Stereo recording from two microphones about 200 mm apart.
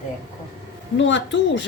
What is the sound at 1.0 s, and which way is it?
Speech, 65° left (ahead or behind).